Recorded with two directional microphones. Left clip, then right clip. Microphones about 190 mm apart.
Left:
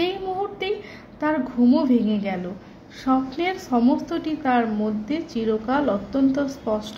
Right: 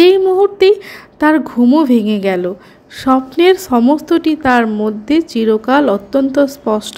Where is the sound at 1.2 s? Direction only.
35° right (ahead or behind).